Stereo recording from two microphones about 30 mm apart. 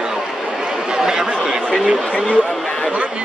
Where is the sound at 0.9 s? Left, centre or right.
Right.